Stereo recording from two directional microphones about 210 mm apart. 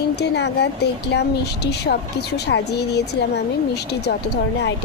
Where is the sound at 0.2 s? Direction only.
55° left (ahead or behind).